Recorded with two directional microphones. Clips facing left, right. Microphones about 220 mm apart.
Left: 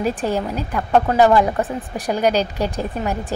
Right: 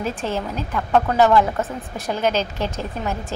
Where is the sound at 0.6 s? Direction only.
10° left (ahead or behind).